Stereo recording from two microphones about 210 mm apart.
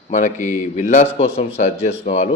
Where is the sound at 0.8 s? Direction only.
35° left (ahead or behind).